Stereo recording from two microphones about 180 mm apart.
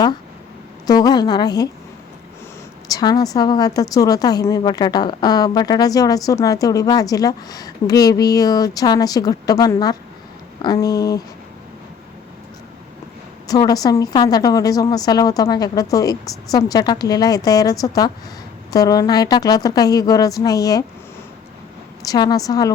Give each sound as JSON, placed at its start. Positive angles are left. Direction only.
{"t": 0.9, "sound": "a woman's voice", "side_deg": 20}
{"t": 2.9, "sound": "a woman's voice", "side_deg": 20}
{"t": 13.5, "sound": "a woman's voice", "side_deg": 20}
{"t": 22.0, "sound": "a woman's voice", "side_deg": 20}